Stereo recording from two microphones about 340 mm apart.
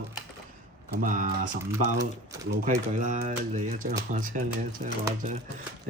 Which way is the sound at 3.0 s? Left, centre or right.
Right.